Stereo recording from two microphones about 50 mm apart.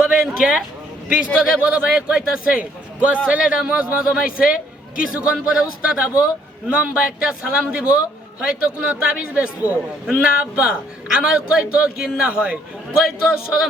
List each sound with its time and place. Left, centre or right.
0.0 s a sound: centre
1.1 s speech: right
2.6 s a man's voice: right
13.0 s speech: centre